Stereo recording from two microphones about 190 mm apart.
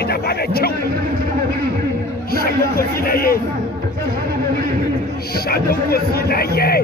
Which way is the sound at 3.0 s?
50° left (ahead or behind).